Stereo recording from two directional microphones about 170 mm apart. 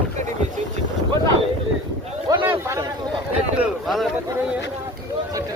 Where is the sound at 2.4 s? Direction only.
15° right (ahead or behind).